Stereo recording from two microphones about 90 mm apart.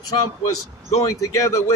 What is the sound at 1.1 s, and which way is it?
Speech, 35° left (ahead or behind).